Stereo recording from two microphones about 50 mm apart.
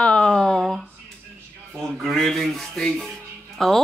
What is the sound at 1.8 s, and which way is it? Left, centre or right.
Speech, centre.